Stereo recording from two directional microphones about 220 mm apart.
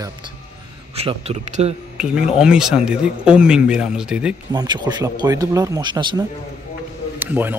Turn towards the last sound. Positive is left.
turn(degrees=-10)  # may be behind; listen again after turning